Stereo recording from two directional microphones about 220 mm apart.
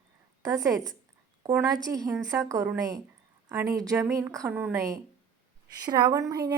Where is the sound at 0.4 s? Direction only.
15° right (ahead or behind).